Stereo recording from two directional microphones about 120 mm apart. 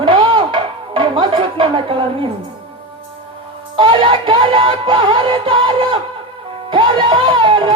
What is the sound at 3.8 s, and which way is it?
Music, 45° right (ahead or behind).